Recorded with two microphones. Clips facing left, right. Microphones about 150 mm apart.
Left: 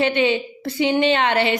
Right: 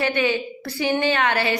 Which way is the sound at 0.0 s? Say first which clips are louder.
Left 3 dB; 25° left (ahead or behind).